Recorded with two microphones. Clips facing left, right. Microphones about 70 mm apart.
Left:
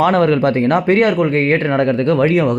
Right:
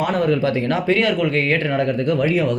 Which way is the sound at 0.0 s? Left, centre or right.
Left.